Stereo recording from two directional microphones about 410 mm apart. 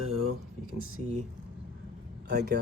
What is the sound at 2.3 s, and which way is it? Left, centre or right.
Speech, right.